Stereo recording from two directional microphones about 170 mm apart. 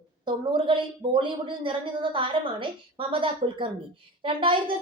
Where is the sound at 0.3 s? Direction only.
30° right (ahead or behind).